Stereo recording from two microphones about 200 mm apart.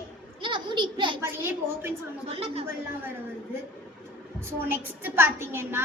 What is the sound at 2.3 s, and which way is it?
Speech, 30° right (ahead or behind).